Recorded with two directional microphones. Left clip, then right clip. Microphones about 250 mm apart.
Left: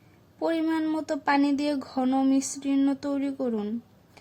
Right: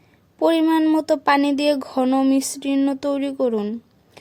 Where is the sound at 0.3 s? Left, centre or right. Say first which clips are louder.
Right 9 dB; right.